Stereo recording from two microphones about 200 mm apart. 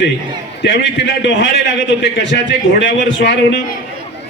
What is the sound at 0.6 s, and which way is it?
A man's voice, 65° left (ahead or behind).